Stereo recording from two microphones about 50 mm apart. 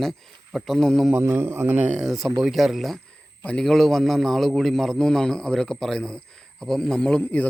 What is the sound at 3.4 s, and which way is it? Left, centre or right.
Speech, left.